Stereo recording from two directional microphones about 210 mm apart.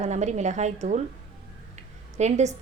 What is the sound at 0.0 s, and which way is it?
Speech, 35° right (ahead or behind).